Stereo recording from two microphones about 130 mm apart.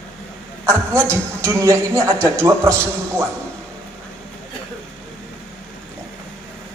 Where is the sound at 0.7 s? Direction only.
20° right (ahead or behind).